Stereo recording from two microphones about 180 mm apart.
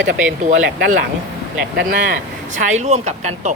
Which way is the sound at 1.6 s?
50° right (ahead or behind).